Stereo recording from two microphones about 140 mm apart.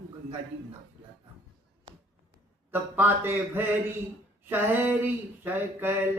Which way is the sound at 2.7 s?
15° right (ahead or behind).